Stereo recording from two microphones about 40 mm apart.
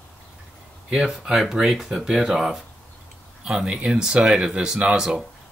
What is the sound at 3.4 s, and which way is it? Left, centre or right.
Speech, right.